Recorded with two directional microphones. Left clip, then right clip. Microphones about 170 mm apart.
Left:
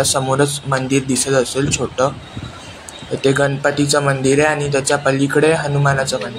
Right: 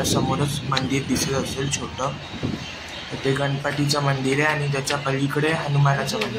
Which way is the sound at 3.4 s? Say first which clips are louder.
Left 8 dB; 30° left (ahead or behind).